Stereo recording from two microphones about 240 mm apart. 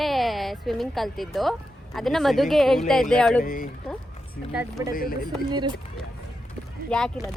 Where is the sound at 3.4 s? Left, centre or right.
Left.